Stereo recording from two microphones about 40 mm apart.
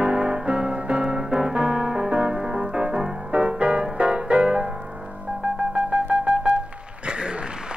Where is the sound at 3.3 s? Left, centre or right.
Right.